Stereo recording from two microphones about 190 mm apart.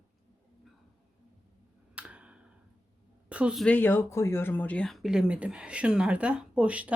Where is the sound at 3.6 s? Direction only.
10° left (ahead or behind).